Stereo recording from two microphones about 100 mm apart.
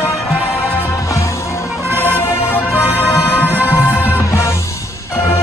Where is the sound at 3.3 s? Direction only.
20° left (ahead or behind).